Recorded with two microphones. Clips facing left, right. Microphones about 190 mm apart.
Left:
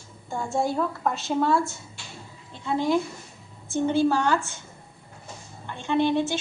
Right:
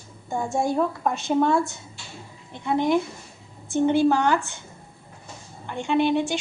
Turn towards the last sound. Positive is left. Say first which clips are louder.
# right 1 dB
turn(degrees=-15)  # may be behind; listen again after turning